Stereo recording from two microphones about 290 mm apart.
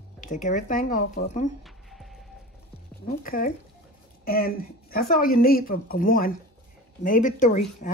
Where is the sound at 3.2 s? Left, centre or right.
Left.